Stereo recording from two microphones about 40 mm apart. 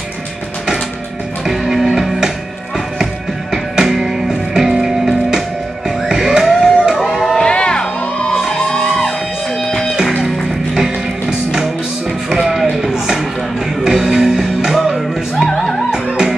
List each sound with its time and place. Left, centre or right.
1.4 s music: centre
3.5 s music: centre
6.0 s a sound: centre
7.3 s music: left
10.7 s music: centre
12.9 s a sound: centre
13.8 s music: centre